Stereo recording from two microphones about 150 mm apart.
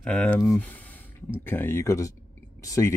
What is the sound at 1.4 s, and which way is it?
Speech, 15° left (ahead or behind).